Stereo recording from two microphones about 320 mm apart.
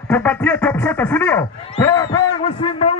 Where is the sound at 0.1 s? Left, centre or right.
Centre.